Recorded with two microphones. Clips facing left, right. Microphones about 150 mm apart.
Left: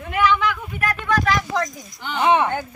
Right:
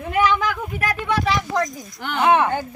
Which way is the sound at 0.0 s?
35° right (ahead or behind).